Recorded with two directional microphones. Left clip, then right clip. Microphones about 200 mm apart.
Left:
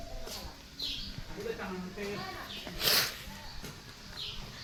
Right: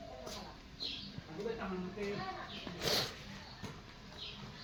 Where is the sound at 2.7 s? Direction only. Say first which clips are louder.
Left 7 dB; 15° right (ahead or behind).